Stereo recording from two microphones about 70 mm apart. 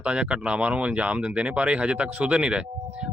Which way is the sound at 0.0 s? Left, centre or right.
Centre.